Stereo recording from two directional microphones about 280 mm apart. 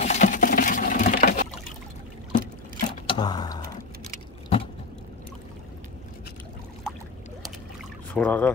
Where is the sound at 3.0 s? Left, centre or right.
Centre.